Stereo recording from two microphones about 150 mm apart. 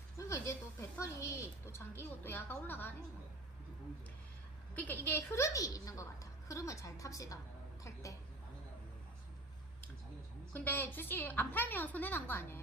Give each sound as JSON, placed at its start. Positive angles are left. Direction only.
{"t": 0.2, "sound": "a woman's voice", "side_deg": 20}
{"t": 4.7, "sound": "a woman's voice", "side_deg": 10}
{"t": 10.5, "sound": "a woman's voice", "side_deg": 10}